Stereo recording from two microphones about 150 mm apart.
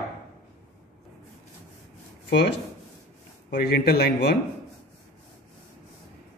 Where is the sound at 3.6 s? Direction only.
90° left.